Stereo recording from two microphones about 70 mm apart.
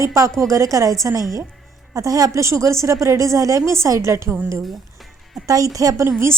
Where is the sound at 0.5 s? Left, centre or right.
Right.